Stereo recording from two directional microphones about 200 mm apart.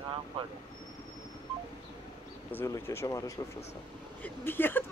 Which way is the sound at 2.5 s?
10° left (ahead or behind).